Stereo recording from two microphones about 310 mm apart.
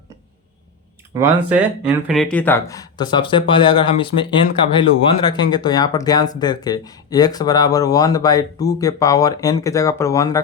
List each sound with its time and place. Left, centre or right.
1.1 s speech: centre